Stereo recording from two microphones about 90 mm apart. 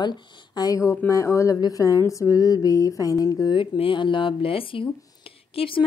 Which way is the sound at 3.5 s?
70° left (ahead or behind).